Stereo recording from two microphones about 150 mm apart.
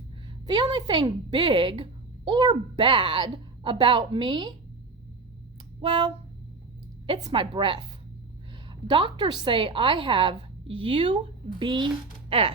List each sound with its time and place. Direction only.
0.4 s speech: 30° right (ahead or behind)
5.8 s speech: 35° right (ahead or behind)
8.9 s speech: 35° right (ahead or behind)